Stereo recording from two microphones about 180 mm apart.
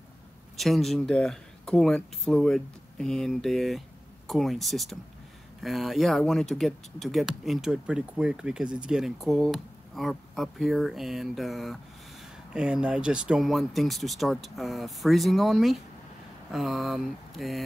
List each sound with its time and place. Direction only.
0.6 s speech: centre (ahead or behind)